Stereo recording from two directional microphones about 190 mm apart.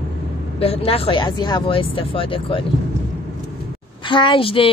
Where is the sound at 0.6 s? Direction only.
30° left (ahead or behind).